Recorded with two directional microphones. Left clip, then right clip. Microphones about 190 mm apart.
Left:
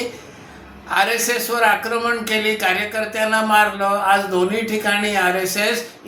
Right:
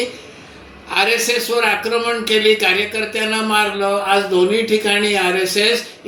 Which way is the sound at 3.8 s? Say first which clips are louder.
Right 1 dB; 15° left (ahead or behind).